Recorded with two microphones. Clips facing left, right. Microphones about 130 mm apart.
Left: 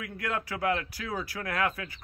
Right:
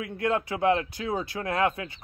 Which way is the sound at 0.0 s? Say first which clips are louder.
Right 7 dB; 25° right (ahead or behind).